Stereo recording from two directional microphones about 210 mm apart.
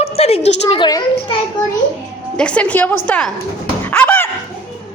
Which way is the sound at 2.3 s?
5° left (ahead or behind).